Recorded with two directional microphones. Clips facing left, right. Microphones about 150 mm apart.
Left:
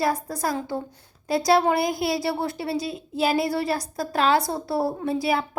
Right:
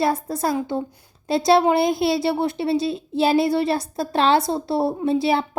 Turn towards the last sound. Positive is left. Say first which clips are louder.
# right 4 dB
turn(degrees=-25)  # may be behind; listen again after turning